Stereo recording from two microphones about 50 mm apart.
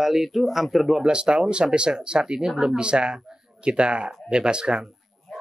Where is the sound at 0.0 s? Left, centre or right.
Centre.